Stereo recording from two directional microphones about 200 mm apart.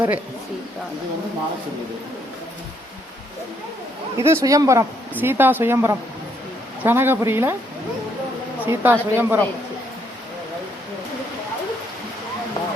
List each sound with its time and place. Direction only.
4.2 s a woman's voice: 15° right (ahead or behind)
8.6 s a woman's voice: 10° right (ahead or behind)
12.6 s a sound: 20° left (ahead or behind)